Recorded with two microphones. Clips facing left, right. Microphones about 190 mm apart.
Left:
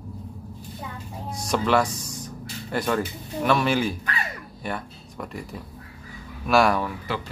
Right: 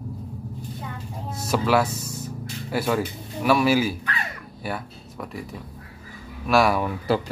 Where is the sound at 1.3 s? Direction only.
5° right (ahead or behind).